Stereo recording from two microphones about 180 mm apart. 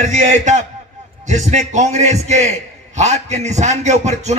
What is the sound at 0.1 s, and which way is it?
A man's voice, 40° right (ahead or behind).